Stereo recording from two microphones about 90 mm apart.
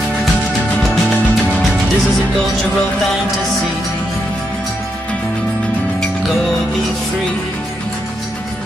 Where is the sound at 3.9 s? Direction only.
15° left (ahead or behind).